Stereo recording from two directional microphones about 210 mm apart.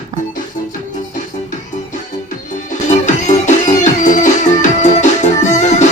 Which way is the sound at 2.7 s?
35° left (ahead or behind).